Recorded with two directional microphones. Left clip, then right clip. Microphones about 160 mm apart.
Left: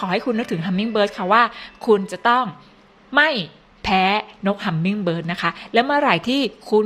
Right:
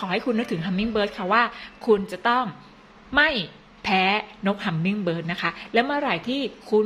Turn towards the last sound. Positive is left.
turn(degrees=25)  # may be behind; listen again after turning